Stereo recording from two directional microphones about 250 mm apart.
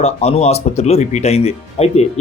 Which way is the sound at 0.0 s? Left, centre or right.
Left.